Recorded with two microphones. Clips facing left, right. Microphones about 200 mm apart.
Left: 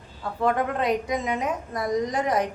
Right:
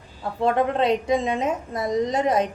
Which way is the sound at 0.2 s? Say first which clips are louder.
Right 3 dB; 25° right (ahead or behind).